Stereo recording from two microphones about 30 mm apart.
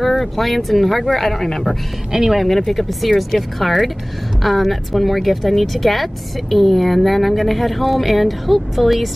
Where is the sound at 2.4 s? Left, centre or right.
Centre.